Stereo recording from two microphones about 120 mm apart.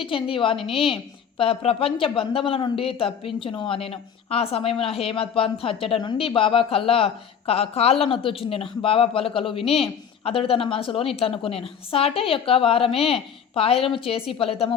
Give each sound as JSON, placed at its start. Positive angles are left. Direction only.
{"t": 0.0, "sound": "speech", "side_deg": 45}